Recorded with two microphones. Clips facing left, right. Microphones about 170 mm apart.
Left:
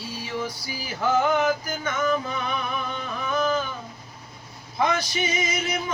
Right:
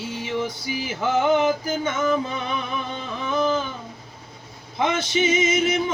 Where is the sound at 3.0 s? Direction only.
25° right (ahead or behind).